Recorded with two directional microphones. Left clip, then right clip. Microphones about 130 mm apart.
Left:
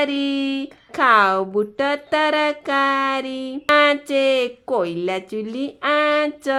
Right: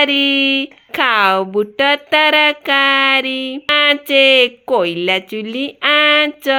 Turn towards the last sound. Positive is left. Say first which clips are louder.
# right 6 dB
turn(degrees=-15)  # may be behind; listen again after turning